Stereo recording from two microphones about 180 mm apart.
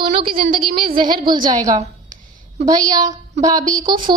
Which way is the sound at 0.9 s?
25° right (ahead or behind).